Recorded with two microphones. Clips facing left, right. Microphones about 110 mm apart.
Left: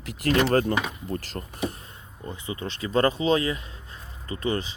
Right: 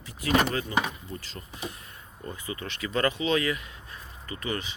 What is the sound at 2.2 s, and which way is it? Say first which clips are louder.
Speech: left 3 dB; 25° left (ahead or behind).